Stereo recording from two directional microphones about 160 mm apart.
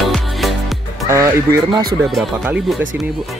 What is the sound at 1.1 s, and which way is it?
Speech, 20° right (ahead or behind).